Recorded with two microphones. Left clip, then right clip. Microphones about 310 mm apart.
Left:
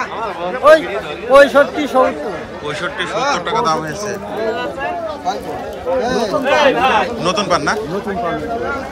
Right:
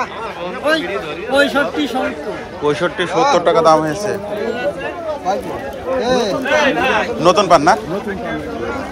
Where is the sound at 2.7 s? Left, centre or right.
Centre.